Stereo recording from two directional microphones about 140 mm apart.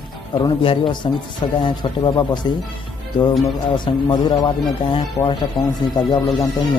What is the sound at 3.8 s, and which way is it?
Speech, 30° left (ahead or behind).